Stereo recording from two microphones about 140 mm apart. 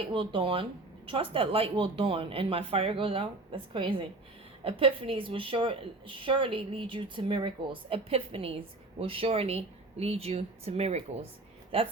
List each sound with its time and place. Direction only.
0.1 s a woman's voice: 35° right (ahead or behind)